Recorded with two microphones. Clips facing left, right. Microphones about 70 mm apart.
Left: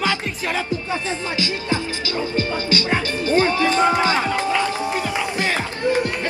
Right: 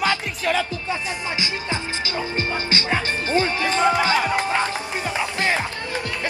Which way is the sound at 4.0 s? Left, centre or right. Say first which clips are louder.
Left 1 dB; left.